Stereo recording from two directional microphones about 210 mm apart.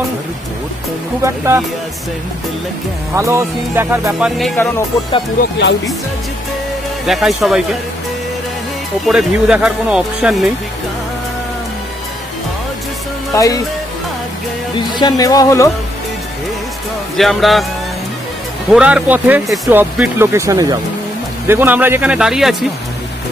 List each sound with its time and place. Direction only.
1.2 s speech: 15° right (ahead or behind)
3.2 s speech: 15° right (ahead or behind)
7.1 s speech: centre (ahead or behind)
9.0 s speech: 5° right (ahead or behind)
13.3 s speech: 15° left (ahead or behind)
15.0 s speech: 20° left (ahead or behind)
17.2 s speech: centre (ahead or behind)
18.7 s speech: 5° right (ahead or behind)